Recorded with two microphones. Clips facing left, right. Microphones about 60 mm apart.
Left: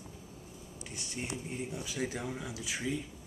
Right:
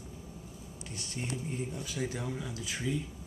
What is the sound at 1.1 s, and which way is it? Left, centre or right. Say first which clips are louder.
Speech: right 2 dB; centre.